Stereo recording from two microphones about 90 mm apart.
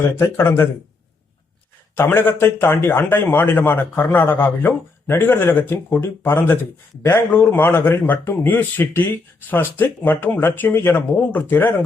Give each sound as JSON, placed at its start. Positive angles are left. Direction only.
{"t": 0.2, "sound": "a man's voice", "side_deg": 25}
{"t": 2.0, "sound": "a man's voice", "side_deg": 25}